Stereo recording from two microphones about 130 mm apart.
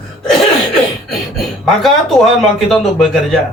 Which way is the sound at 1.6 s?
Centre (ahead or behind).